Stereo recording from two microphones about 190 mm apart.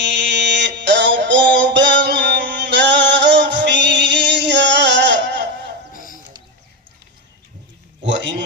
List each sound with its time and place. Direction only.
0.0 s music: 70° right (ahead or behind)
5.9 s music: 45° left (ahead or behind)
8.0 s a sound: 70° right (ahead or behind)